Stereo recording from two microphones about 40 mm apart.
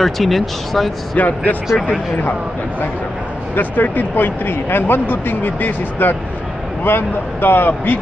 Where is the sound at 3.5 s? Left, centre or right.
Left.